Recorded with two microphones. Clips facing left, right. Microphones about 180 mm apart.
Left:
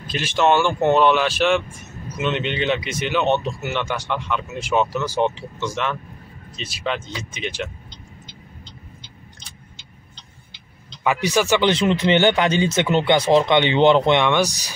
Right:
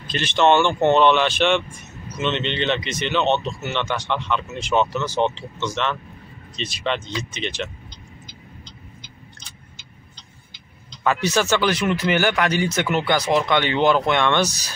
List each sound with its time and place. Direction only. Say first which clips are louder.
0.0 s speech: right 1 dB; 5° left (ahead or behind)
11.1 s speech: left 1 dB; 15° left (ahead or behind)
11.7 s speech: left 3 dB; 25° left (ahead or behind)
14.2 s speech: left 1 dB; 15° left (ahead or behind)